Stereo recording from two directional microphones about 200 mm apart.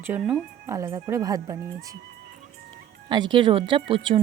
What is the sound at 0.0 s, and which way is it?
Speech, 5° right (ahead or behind).